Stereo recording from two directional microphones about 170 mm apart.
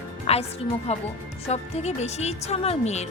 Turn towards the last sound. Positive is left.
turn(degrees=40)  # may be behind; listen again after turning